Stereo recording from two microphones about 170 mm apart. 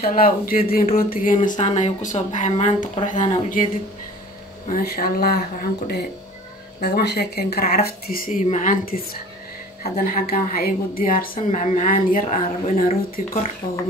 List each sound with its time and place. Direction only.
0.0 s a woman's voice: 60° left (ahead or behind)
4.6 s a woman's voice: 55° left (ahead or behind)